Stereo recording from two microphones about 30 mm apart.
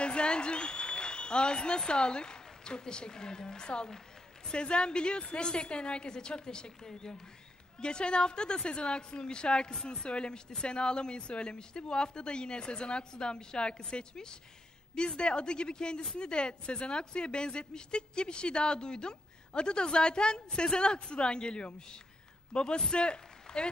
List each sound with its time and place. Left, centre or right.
0.0 s applause: left
1.9 s a woman's voice: left
6.8 s a woman's voice: centre
7.8 s a woman's voice: left